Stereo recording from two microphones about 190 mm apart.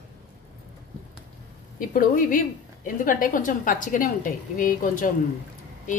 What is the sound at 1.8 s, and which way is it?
A woman's voice, 45° left (ahead or behind).